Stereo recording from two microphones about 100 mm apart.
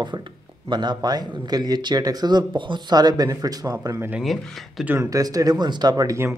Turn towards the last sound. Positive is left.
turn(degrees=-35)  # may be behind; listen again after turning